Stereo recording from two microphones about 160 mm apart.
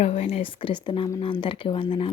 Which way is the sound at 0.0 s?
40° left (ahead or behind).